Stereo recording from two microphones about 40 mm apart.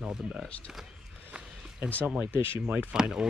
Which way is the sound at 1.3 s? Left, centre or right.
Right.